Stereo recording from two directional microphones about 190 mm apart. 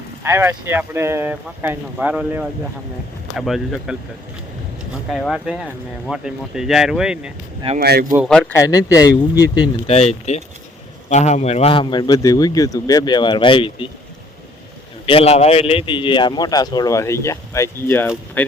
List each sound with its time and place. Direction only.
0.2 s speech: 15° right (ahead or behind)
5.1 s speech: centre (ahead or behind)
7.8 s speech: 55° right (ahead or behind)
8.1 s speech: centre (ahead or behind)
8.5 s a man's voice: 15° left (ahead or behind)
9.9 s a man's voice: 35° left (ahead or behind)
15.0 s a man's voice: 30° left (ahead or behind); by 18.5 s 10° left (ahead or behind)